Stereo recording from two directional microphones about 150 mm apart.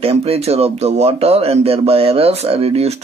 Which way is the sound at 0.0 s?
45° right (ahead or behind).